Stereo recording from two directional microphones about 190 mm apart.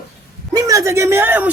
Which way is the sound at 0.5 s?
20° right (ahead or behind).